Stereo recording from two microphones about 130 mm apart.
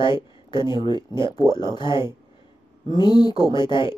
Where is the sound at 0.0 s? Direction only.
40° left (ahead or behind).